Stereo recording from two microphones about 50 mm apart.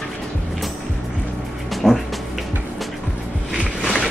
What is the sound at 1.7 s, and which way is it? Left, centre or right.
Music, centre.